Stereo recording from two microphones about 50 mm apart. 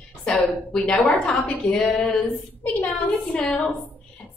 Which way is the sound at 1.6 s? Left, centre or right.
Centre.